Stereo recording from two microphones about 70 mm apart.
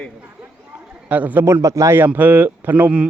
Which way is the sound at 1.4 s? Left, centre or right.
Right.